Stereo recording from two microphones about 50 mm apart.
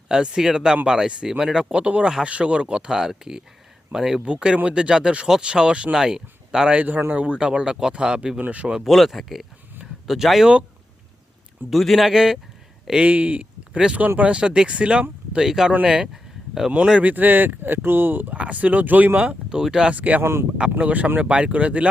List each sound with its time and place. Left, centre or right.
0.1 s speech: centre
1.7 s speech: right
6.7 s speech: right; by 8.4 s centre
8.4 s speech: right
8.8 s speech: centre
11.7 s speech: centre
12.9 s speech: right
15.4 s speech: centre
16.7 s speech: centre
17.0 s speech: right
18.3 s speech: right
20.0 s speech: right